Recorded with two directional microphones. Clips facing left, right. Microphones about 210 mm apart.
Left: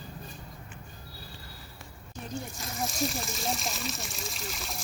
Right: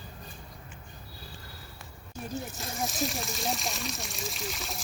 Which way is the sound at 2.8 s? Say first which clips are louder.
Left 1 dB; centre (ahead or behind).